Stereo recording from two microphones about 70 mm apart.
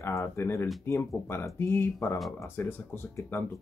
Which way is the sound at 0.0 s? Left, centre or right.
Left.